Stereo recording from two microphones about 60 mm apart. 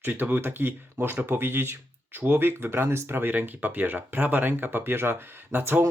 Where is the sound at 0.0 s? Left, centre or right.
Right.